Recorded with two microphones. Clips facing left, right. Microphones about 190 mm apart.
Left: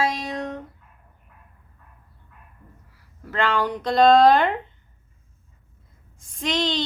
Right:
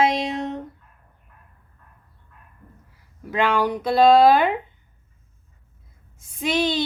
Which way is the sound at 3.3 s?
10° right (ahead or behind).